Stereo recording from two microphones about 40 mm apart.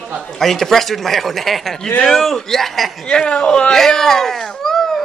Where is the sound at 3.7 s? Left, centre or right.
Centre.